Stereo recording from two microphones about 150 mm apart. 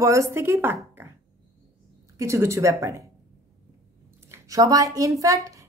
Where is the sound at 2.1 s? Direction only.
20° right (ahead or behind).